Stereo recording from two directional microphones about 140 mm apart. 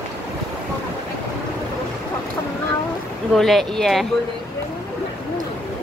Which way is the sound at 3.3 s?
Centre (ahead or behind).